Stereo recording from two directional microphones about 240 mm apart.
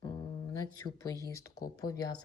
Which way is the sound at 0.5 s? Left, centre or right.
Centre.